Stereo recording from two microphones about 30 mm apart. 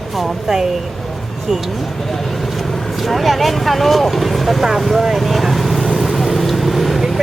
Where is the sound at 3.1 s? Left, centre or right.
Centre.